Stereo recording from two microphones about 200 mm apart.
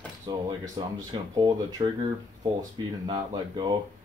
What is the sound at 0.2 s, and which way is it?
Speech, 20° right (ahead or behind).